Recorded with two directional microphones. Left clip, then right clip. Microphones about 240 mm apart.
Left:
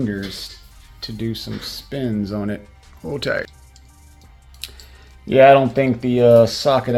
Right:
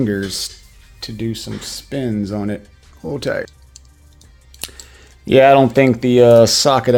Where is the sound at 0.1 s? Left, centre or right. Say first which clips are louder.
Right 6 dB; right.